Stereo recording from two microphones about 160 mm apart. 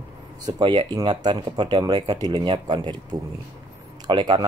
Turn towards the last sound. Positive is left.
turn(degrees=-25)  # may be behind; listen again after turning